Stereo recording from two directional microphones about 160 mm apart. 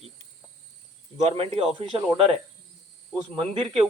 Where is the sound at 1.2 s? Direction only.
35° right (ahead or behind).